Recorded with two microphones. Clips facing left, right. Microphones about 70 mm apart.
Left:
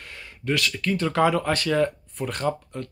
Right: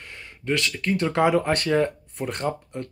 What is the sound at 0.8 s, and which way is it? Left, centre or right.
Speech, right.